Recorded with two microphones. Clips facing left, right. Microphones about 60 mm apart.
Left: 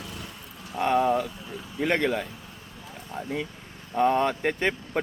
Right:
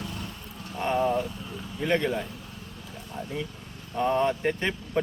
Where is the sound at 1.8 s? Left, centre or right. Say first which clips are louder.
Left 1 dB; left.